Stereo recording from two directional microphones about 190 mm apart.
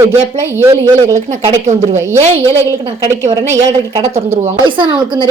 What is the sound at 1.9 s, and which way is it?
Speech, 15° right (ahead or behind).